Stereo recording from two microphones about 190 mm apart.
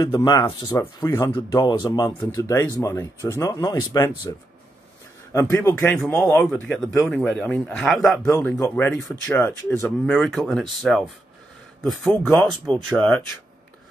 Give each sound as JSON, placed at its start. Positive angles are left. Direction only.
{"t": 0.0, "sound": "speech", "side_deg": 25}
{"t": 5.3, "sound": "speech", "side_deg": 15}
{"t": 8.3, "sound": "speech", "side_deg": 10}